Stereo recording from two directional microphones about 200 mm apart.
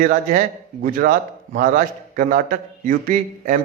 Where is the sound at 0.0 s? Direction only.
40° right (ahead or behind).